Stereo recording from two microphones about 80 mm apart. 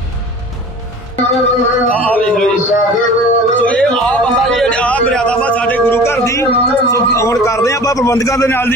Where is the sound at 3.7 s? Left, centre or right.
Centre.